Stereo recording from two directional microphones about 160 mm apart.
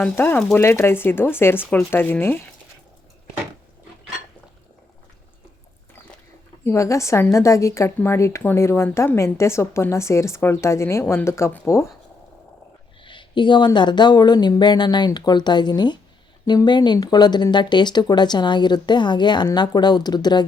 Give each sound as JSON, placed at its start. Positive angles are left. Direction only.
{"t": 0.0, "sound": "a woman's voice", "side_deg": 10}
{"t": 6.7, "sound": "a woman's voice", "side_deg": 20}
{"t": 13.0, "sound": "speech", "side_deg": 30}